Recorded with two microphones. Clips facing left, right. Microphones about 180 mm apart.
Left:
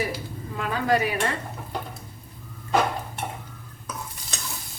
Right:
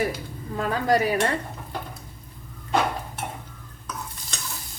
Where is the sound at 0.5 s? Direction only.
40° right (ahead or behind).